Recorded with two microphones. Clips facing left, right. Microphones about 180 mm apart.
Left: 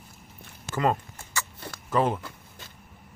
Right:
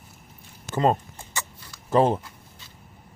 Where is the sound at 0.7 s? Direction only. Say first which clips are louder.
Right 4 dB; 25° right (ahead or behind).